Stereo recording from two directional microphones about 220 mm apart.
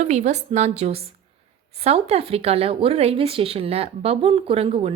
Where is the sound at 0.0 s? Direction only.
30° right (ahead or behind).